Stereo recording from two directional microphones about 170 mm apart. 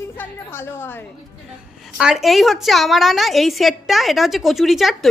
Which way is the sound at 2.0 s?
5° right (ahead or behind).